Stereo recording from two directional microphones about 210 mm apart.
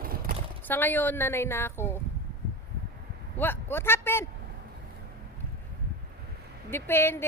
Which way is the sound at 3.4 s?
10° left (ahead or behind).